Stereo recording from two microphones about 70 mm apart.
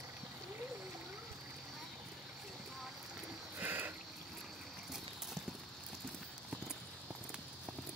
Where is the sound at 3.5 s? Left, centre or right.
Right.